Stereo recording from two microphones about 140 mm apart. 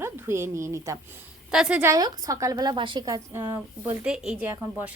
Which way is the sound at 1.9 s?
25° right (ahead or behind).